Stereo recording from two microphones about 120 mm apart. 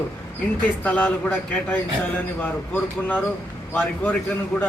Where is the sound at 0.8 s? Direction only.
15° left (ahead or behind).